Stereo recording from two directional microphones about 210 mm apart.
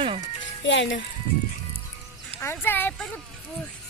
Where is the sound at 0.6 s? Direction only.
60° left (ahead or behind).